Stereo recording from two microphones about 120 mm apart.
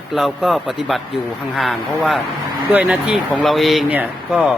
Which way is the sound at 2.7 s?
10° right (ahead or behind).